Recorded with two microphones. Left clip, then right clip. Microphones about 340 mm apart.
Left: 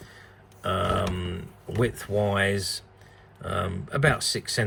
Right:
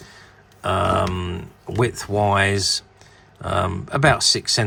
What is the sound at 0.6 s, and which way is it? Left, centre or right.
Grunt, right.